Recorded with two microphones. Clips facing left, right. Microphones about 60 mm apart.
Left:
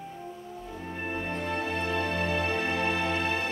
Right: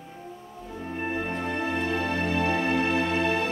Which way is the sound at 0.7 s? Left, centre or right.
Centre.